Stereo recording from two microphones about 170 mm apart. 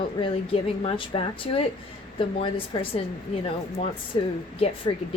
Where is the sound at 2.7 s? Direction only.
30° left (ahead or behind).